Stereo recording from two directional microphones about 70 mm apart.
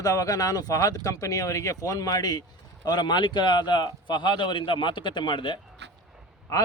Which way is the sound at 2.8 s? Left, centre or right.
Left.